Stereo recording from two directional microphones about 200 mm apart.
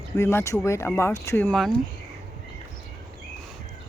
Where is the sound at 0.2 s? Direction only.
15° left (ahead or behind).